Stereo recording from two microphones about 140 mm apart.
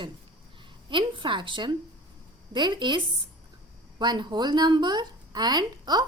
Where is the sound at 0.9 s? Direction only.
35° right (ahead or behind).